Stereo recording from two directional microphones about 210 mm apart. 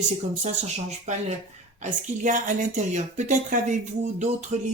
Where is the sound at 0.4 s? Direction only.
35° right (ahead or behind).